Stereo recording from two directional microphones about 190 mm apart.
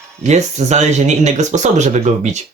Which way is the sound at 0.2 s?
35° right (ahead or behind).